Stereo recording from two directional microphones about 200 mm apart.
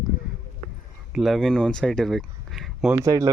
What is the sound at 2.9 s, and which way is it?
Speech, 15° right (ahead or behind).